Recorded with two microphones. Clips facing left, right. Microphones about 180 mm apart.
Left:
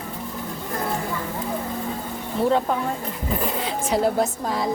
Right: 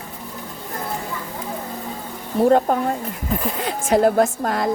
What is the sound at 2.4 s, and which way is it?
A woman's voice, 45° right (ahead or behind).